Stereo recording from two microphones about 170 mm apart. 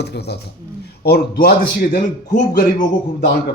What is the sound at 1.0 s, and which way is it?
Speech, 65° left (ahead or behind).